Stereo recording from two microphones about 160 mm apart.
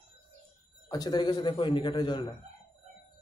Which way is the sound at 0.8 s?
25° left (ahead or behind).